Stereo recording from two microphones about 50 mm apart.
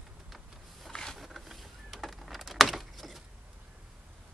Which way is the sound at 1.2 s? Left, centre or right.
Centre.